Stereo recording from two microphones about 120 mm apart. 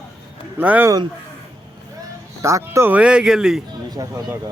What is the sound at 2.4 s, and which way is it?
Speech, 25° right (ahead or behind).